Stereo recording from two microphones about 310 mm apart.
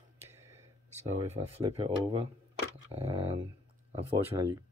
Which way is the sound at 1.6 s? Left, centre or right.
Centre.